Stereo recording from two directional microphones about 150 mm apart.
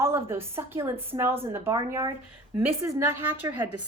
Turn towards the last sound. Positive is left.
turn(degrees=-15)  # may be behind; listen again after turning